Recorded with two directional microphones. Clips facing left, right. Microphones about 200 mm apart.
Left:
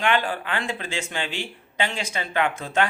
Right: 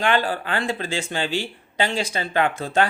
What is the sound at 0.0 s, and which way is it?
Speech, 35° right (ahead or behind).